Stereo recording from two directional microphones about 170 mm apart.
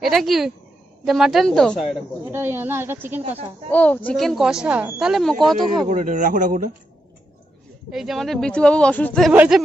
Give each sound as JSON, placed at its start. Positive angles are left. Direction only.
{"t": 0.0, "sound": "speech", "side_deg": 0}
{"t": 2.3, "sound": "a woman's voice", "side_deg": -15}
{"t": 3.7, "sound": "speech", "side_deg": 10}
{"t": 5.9, "sound": "a man's voice", "side_deg": -50}
{"t": 7.9, "sound": "speech", "side_deg": 0}
{"t": 9.3, "sound": "a woman's voice", "side_deg": -10}